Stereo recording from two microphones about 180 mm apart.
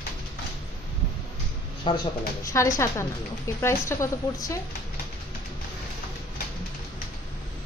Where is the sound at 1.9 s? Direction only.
25° left (ahead or behind).